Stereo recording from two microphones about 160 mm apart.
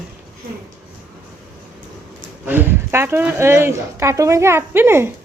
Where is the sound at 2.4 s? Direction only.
10° right (ahead or behind).